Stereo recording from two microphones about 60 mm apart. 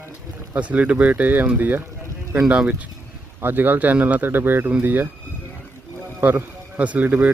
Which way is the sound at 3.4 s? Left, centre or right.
Right.